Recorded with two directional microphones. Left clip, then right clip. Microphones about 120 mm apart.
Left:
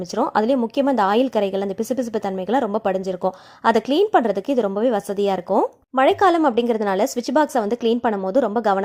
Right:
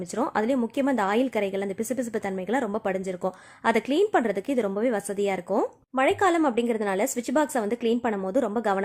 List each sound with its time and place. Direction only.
0.2 s a woman's voice: 25° left (ahead or behind)